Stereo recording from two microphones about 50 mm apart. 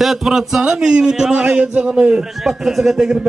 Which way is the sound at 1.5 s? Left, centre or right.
Right.